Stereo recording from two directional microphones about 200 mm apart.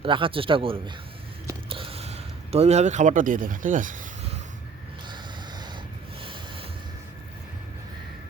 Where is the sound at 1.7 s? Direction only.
25° right (ahead or behind).